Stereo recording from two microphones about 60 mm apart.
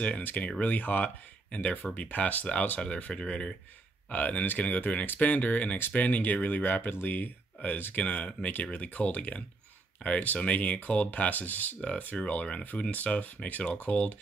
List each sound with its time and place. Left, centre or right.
0.2 s speech: left